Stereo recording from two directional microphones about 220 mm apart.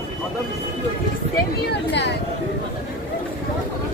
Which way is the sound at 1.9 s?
50° left (ahead or behind).